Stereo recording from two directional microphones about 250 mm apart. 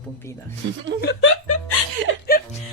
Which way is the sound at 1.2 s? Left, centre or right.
Left.